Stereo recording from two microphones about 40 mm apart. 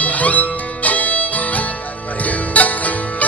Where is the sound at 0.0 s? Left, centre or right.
Left.